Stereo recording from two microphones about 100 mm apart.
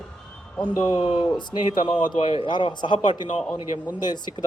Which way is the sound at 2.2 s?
75° left (ahead or behind).